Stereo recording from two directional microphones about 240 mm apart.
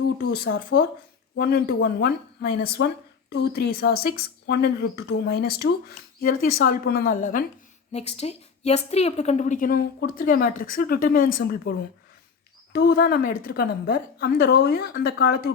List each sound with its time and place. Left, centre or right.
0.2 s a woman's voice: left
12.7 s a woman's voice: left